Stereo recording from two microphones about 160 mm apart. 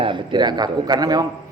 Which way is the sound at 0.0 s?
30° right (ahead or behind).